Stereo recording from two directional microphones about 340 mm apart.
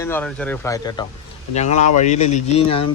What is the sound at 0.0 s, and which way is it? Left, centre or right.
Speech, centre.